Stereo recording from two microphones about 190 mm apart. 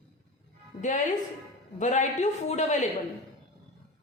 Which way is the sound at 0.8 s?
40° left (ahead or behind).